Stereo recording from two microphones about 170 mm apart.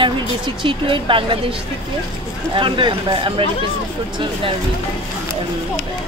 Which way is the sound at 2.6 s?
30° right (ahead or behind).